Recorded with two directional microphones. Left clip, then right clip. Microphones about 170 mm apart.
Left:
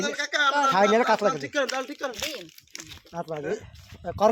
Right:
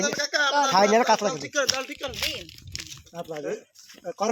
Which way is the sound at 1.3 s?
80° left.